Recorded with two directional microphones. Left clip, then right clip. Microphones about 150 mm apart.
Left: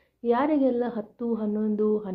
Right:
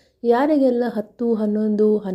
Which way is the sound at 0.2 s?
40° right (ahead or behind).